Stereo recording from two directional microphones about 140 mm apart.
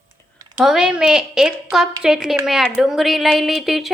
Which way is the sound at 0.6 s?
5° right (ahead or behind).